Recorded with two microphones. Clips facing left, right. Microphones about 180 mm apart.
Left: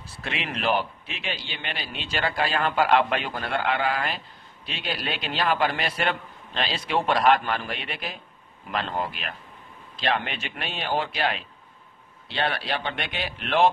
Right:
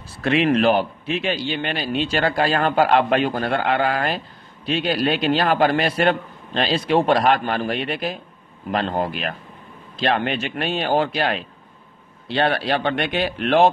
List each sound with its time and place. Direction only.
0.2 s a man's voice: 45° right (ahead or behind)